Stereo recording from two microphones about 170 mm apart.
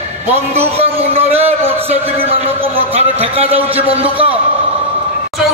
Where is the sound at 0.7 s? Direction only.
35° right (ahead or behind).